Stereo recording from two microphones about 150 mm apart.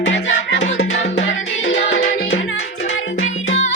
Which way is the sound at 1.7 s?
55° left (ahead or behind).